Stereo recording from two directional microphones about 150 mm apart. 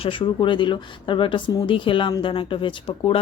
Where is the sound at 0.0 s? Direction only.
35° left (ahead or behind).